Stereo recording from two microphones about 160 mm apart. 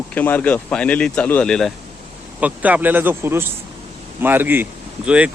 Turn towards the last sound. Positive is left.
turn(degrees=-10)  # may be behind; listen again after turning